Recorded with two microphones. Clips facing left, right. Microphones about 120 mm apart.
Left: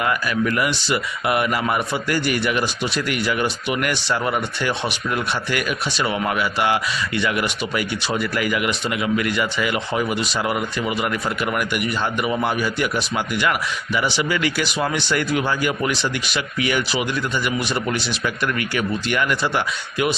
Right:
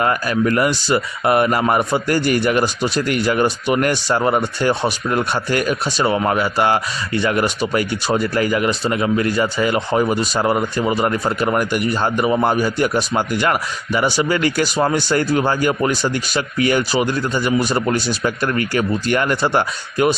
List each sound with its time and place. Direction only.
0.0 s speech: 40° right (ahead or behind)